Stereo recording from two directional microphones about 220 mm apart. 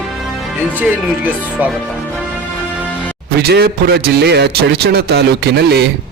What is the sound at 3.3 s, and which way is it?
A man's voice, 50° right (ahead or behind).